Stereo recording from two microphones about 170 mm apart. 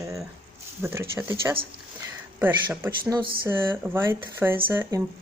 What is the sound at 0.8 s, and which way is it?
Speech, 15° right (ahead or behind).